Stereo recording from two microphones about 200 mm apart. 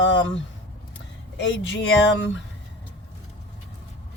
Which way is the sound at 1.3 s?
65° left (ahead or behind).